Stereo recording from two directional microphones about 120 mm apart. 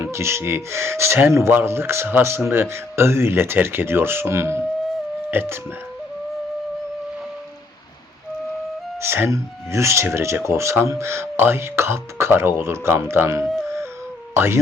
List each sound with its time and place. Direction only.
0.0 s speech: 20° right (ahead or behind)
9.0 s speech: 20° right (ahead or behind)